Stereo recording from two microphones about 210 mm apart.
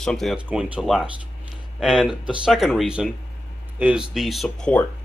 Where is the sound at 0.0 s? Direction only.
Centre (ahead or behind).